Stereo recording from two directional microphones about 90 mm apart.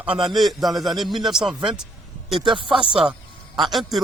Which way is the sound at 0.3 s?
Centre (ahead or behind).